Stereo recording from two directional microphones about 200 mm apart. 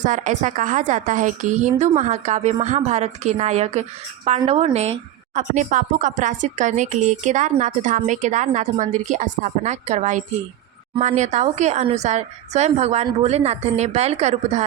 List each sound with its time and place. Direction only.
0.0 s a woman's voice: 40° right (ahead or behind)